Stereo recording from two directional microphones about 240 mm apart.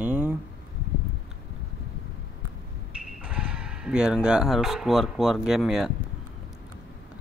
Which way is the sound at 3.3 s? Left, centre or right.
Centre.